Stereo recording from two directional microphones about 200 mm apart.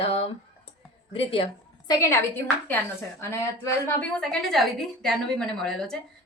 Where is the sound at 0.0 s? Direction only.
30° left (ahead or behind).